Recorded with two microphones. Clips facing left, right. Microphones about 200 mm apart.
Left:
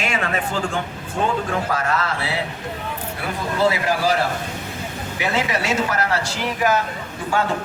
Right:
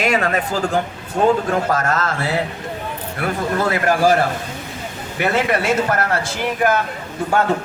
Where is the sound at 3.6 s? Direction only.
50° right (ahead or behind).